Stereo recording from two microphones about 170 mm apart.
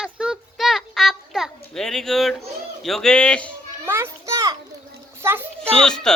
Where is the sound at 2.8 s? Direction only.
Centre (ahead or behind).